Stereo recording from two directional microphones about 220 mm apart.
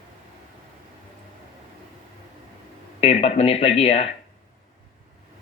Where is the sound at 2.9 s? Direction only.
30° left (ahead or behind).